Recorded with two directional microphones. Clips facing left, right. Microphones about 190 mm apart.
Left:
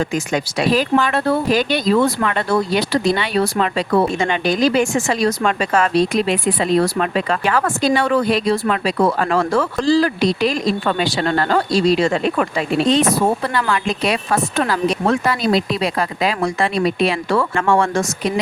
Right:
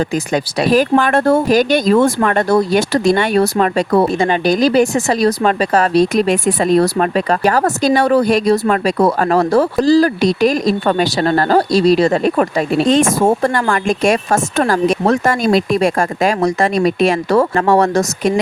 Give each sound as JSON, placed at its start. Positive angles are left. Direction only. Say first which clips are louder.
{"t": 0.1, "sound": "speech", "louder": "right 3 dB", "side_deg": -35}